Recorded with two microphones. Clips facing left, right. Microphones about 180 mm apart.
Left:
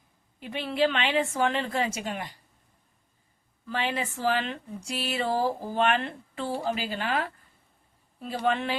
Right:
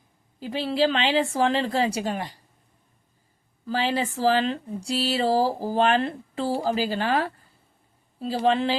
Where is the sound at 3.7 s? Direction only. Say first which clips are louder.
Right 5 dB; 35° right (ahead or behind).